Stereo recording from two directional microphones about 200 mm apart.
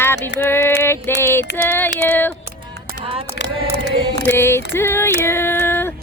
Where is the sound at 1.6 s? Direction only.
10° left (ahead or behind).